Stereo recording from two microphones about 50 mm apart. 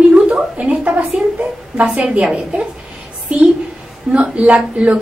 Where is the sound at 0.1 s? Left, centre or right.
Right.